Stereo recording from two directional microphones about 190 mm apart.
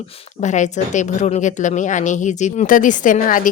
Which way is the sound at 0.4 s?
40° left (ahead or behind).